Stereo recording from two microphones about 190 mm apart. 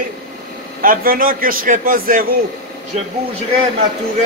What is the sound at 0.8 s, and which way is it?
A man's voice, 50° right (ahead or behind).